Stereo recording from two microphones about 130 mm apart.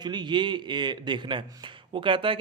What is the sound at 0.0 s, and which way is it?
A man's voice, 35° right (ahead or behind).